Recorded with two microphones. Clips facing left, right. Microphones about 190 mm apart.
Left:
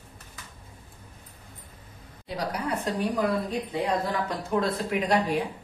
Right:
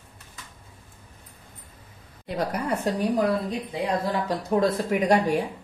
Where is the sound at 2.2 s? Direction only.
55° right (ahead or behind).